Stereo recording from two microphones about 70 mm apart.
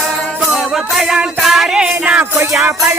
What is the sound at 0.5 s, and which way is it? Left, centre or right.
Music, centre.